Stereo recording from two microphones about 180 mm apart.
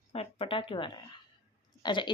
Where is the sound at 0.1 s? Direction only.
35° left (ahead or behind).